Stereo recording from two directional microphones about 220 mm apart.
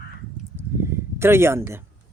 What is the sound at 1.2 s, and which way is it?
Speech, 10° right (ahead or behind).